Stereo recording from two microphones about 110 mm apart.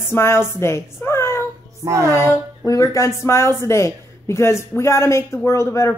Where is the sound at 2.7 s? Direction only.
30° left (ahead or behind).